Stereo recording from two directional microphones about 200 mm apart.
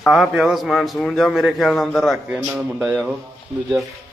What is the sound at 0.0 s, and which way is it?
A man's voice, centre (ahead or behind).